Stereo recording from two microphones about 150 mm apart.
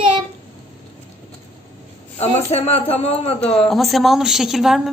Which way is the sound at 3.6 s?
Centre (ahead or behind).